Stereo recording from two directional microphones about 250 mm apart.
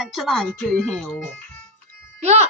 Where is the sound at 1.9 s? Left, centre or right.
Right.